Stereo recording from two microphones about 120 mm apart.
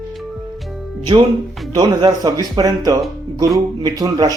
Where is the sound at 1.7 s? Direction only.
35° right (ahead or behind).